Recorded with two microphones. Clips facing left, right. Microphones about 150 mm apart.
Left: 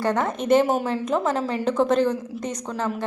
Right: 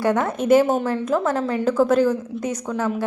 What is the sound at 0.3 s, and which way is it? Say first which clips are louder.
A woman's voice: right 2 dB; 5° right (ahead or behind).